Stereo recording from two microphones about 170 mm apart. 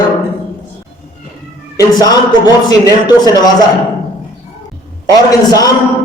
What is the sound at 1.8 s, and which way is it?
A man's voice, 25° left (ahead or behind).